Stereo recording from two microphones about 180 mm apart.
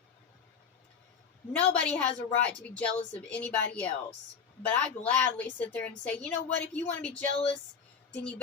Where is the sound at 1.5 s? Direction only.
5° left (ahead or behind).